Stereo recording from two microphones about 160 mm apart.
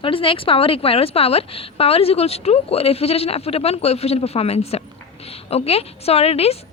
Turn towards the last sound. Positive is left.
turn(degrees=40)  # may be behind; listen again after turning